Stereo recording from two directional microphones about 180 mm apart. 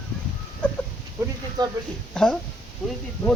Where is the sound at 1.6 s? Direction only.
25° right (ahead or behind).